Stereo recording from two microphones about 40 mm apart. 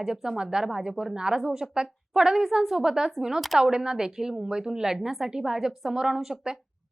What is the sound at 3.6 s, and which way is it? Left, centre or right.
A woman's voice, centre.